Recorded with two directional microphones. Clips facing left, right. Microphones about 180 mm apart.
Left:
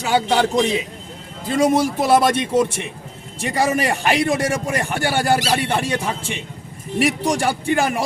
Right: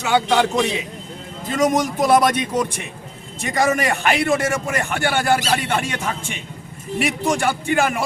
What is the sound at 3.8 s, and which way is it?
A man's voice, 35° left (ahead or behind).